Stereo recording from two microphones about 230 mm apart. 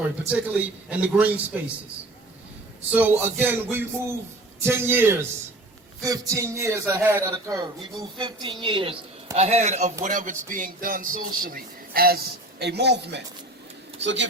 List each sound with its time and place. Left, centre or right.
0.3 s a man's voice: centre
2.9 s a man's voice: centre; by 14.3 s right